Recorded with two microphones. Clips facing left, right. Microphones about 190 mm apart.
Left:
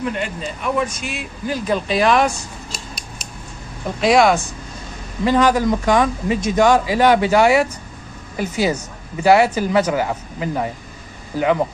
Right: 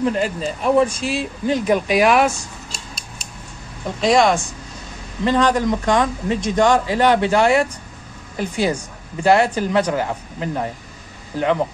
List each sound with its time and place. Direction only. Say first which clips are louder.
0.0 s speech: right 4 dB; 35° right (ahead or behind)
1.6 s speech: right 1 dB; 15° right (ahead or behind)
2.9 s scissors: left 2 dB; 25° right (ahead or behind)
4.0 s speech: left 1 dB; 5° left (ahead or behind)